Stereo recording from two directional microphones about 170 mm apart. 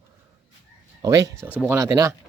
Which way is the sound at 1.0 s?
20° right (ahead or behind).